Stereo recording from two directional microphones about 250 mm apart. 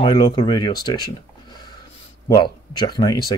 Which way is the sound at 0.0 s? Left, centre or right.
Centre.